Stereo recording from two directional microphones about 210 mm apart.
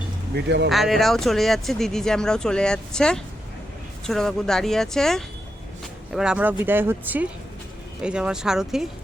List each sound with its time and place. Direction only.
0.3 s speech: 55° right (ahead or behind)
0.7 s speech: centre (ahead or behind)